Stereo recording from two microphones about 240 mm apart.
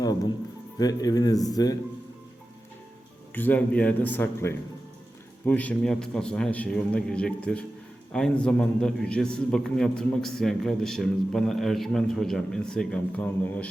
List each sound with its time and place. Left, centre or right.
0.8 s a man's voice: centre
3.3 s a man's voice: centre